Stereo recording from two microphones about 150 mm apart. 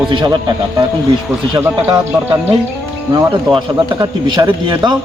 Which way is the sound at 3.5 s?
30° right (ahead or behind).